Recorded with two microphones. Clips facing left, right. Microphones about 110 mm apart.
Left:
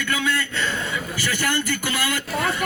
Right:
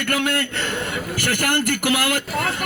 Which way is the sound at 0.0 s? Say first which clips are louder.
Right 2 dB; 60° right (ahead or behind).